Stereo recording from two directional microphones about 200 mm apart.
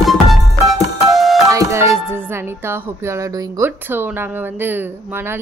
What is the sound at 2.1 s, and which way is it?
Speech, 10° right (ahead or behind).